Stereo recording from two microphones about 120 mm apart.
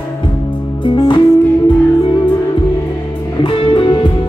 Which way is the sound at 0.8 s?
40° left (ahead or behind).